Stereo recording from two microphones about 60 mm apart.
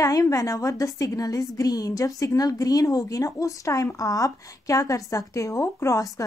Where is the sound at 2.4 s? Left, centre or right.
Left.